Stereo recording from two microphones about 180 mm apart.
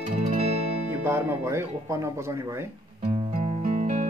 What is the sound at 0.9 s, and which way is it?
Speech, 10° right (ahead or behind).